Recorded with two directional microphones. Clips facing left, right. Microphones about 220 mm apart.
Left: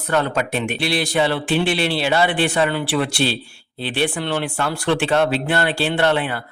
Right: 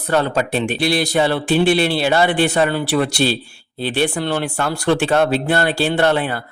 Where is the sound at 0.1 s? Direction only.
35° right (ahead or behind).